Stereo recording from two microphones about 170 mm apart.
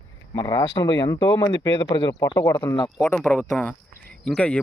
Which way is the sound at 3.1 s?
10° left (ahead or behind).